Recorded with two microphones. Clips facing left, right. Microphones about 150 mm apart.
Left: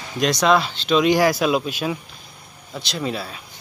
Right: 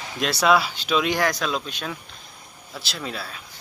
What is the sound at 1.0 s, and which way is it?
Speech, centre (ahead or behind).